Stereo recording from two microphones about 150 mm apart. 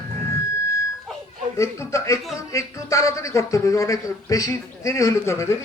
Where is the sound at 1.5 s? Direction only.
20° left (ahead or behind).